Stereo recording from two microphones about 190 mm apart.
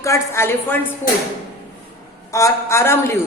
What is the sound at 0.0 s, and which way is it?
Speech, 15° left (ahead or behind).